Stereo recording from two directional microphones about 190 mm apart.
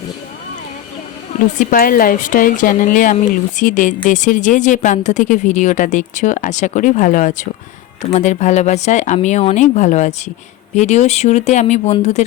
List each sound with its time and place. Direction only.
1.5 s a woman's voice: 45° left (ahead or behind)